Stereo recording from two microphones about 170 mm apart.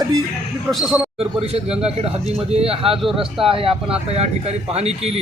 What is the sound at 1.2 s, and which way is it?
A man's voice, 35° right (ahead or behind).